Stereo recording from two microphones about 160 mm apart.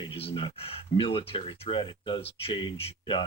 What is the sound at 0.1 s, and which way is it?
Speech, 35° left (ahead or behind).